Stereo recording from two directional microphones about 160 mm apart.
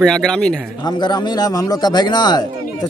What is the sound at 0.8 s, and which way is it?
Speech, 25° left (ahead or behind).